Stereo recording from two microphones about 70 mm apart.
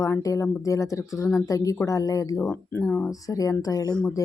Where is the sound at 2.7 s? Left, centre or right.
Left.